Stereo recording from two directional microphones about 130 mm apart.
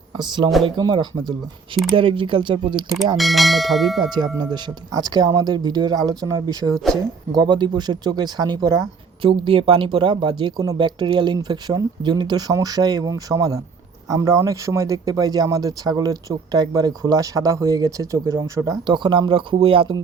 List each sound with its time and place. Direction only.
0.2 s speech: 35° right (ahead or behind)
3.2 s church bell: centre (ahead or behind)
4.4 s speech: 35° right (ahead or behind)
9.2 s speech: 45° right (ahead or behind)